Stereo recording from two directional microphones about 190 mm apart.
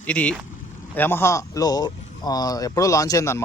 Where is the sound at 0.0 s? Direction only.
5° left (ahead or behind).